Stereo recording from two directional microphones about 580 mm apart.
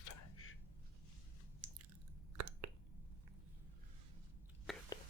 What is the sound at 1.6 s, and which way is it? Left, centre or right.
Biting, centre.